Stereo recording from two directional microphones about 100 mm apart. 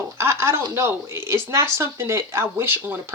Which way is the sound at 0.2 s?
25° right (ahead or behind).